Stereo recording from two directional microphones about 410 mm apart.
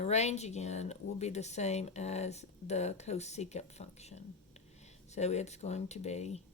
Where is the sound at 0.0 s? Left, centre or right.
Centre.